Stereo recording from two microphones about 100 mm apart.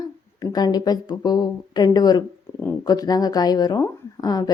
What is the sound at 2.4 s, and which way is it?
Speech, 25° left (ahead or behind).